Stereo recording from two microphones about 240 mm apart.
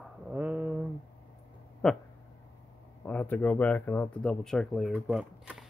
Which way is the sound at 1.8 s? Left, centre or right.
Centre.